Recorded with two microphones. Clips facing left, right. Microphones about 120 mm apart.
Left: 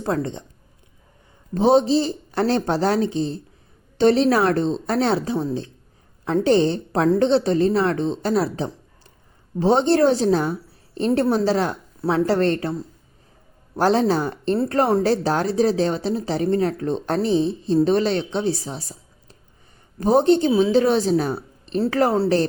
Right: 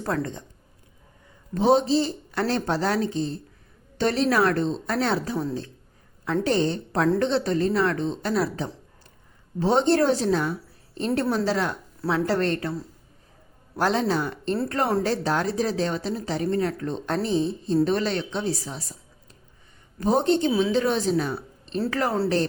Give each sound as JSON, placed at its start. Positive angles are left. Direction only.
{"t": 0.0, "sound": "a woman's voice", "side_deg": 20}
{"t": 1.5, "sound": "a woman's voice", "side_deg": 30}
{"t": 13.7, "sound": "a woman's voice", "side_deg": 30}